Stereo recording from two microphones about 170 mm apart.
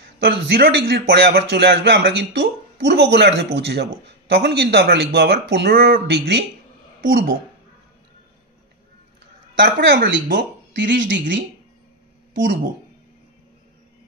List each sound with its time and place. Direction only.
0.2 s a man's voice: 90° right
7.1 s speech: 60° right (ahead or behind)
9.6 s speech: 85° right